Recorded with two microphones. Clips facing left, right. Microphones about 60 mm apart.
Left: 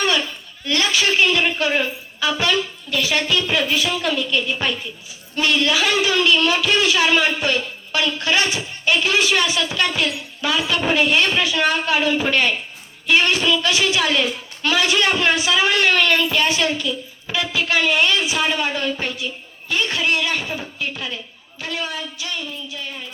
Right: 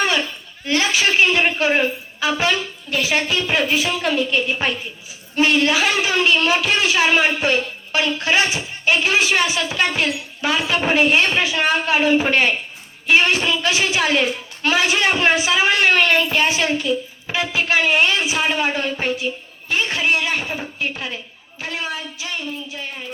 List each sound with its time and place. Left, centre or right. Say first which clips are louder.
0.0 s a man's voice: right 1 dB; right